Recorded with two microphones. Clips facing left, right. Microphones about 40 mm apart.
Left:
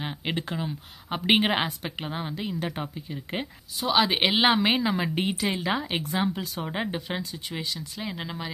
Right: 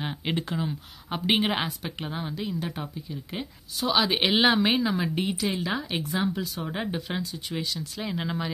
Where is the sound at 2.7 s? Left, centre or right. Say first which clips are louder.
Left 1 dB; left.